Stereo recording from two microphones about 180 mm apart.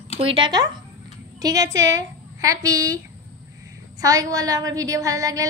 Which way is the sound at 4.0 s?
20° right (ahead or behind).